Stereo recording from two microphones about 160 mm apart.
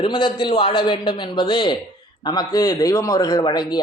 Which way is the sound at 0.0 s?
30° left (ahead or behind).